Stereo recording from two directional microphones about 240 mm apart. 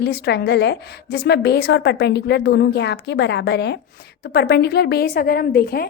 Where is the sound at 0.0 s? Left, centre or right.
Left.